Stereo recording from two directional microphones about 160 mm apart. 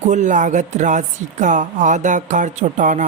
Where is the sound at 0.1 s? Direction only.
50° right (ahead or behind).